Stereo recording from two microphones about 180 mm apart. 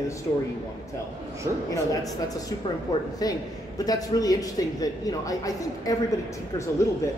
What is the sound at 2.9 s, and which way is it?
Speech, 20° left (ahead or behind).